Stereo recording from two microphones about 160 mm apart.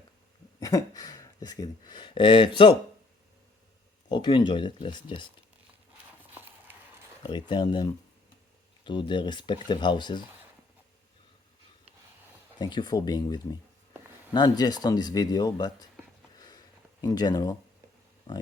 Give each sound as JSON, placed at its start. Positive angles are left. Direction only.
{"t": 0.6, "sound": "speech", "side_deg": 20}
{"t": 4.1, "sound": "speech", "side_deg": 30}
{"t": 6.3, "sound": "a sound", "side_deg": -10}
{"t": 7.2, "sound": "speech", "side_deg": 30}
{"t": 12.5, "sound": "speech", "side_deg": 25}
{"t": 17.0, "sound": "speech", "side_deg": 25}